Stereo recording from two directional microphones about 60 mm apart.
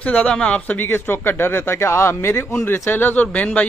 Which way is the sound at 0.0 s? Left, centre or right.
Left.